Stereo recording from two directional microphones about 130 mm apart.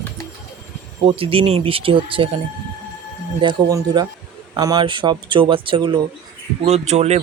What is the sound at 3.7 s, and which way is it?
Speech, 25° right (ahead or behind).